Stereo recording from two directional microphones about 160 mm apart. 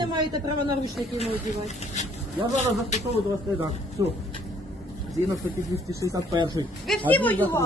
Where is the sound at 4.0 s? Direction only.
25° right (ahead or behind).